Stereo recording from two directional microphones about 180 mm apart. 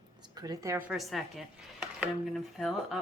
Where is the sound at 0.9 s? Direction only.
Centre (ahead or behind).